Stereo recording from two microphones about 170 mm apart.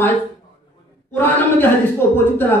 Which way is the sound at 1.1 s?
10° left (ahead or behind).